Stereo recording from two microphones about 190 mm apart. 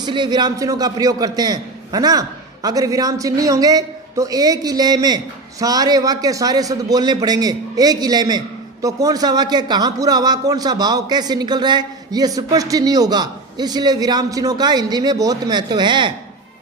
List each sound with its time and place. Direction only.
0.0 s a man's voice: 25° right (ahead or behind)